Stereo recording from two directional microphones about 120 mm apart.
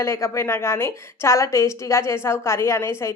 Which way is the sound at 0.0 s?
20° left (ahead or behind).